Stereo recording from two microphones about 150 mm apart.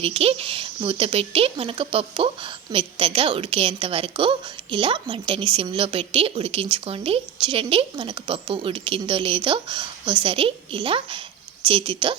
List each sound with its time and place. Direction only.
0.0 s speech: 40° right (ahead or behind)